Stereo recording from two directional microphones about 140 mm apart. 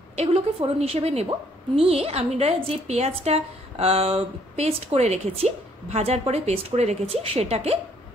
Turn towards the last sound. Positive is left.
turn(degrees=-50)  # may be behind; listen again after turning